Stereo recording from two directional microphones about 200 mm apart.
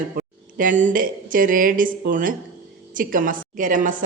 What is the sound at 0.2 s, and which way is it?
A woman's voice, 45° right (ahead or behind).